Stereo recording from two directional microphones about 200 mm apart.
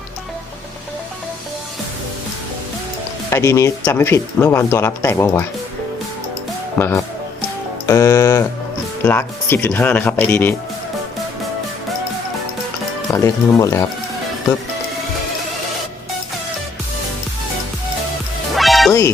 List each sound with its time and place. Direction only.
3.2 s speech: 15° left (ahead or behind)
6.7 s speech: 10° left (ahead or behind)
13.1 s speech: 15° left (ahead or behind)
18.5 s music: centre (ahead or behind)